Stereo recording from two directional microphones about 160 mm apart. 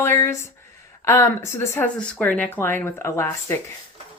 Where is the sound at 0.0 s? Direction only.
15° left (ahead or behind).